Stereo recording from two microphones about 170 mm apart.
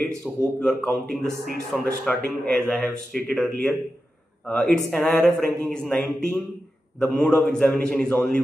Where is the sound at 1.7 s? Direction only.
Centre (ahead or behind).